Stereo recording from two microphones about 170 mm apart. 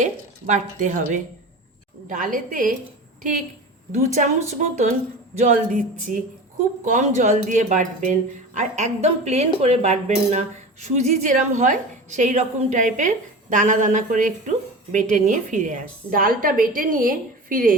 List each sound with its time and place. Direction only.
0.0 s a woman's voice: 45° right (ahead or behind)
3.9 s a woman's voice: 45° right (ahead or behind)